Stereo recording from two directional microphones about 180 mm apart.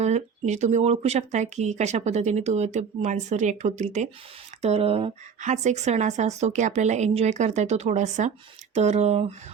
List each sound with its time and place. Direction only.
0.0 s speech: 40° right (ahead or behind)